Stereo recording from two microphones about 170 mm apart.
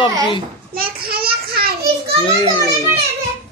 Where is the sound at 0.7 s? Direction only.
60° right (ahead or behind).